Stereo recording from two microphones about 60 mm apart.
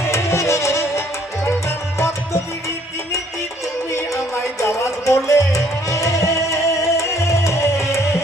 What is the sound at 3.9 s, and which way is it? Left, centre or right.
Music, left.